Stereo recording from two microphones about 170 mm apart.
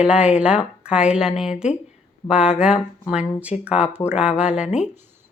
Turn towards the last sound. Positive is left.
turn(degrees=-5)  # may be behind; listen again after turning